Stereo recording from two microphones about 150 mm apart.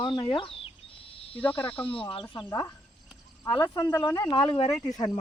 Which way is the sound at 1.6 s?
35° left (ahead or behind).